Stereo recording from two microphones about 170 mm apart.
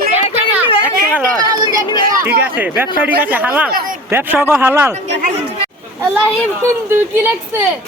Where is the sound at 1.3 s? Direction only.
20° right (ahead or behind).